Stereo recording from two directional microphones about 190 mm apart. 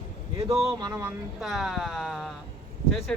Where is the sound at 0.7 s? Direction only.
20° right (ahead or behind).